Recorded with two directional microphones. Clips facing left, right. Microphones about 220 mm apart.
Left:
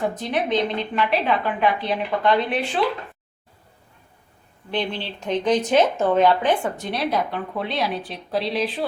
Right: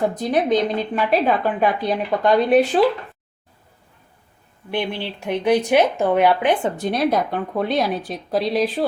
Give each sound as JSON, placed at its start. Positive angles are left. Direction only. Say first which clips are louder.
{"t": 0.2, "sound": "a woman's voice", "louder": "right 5 dB", "side_deg": -40}
{"t": 4.7, "sound": "speech", "louder": "right 2 dB", "side_deg": -10}
{"t": 6.7, "sound": "speech", "louder": "right 5 dB", "side_deg": -45}